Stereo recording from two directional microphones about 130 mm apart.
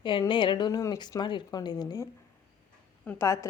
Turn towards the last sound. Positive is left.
turn(degrees=25)  # may be behind; listen again after turning